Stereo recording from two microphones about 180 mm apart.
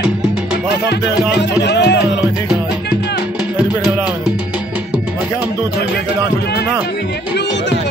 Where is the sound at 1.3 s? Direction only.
70° left (ahead or behind).